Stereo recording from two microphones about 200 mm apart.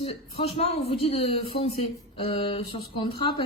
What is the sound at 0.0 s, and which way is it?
Speech, 30° left (ahead or behind).